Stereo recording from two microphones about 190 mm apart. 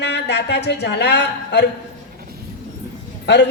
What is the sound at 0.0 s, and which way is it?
A woman's voice, 65° left (ahead or behind).